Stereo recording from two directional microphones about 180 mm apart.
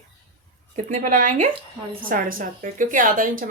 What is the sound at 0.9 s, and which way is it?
Speech, 45° right (ahead or behind).